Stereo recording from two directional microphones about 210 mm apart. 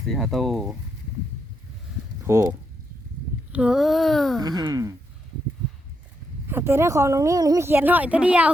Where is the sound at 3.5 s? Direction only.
5° right (ahead or behind).